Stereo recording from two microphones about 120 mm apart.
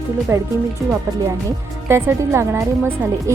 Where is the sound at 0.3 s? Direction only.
20° right (ahead or behind).